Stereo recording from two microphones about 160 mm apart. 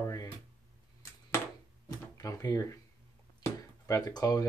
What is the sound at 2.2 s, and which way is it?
Speech, 20° left (ahead or behind).